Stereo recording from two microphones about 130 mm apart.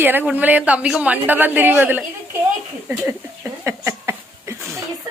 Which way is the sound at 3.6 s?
20° right (ahead or behind).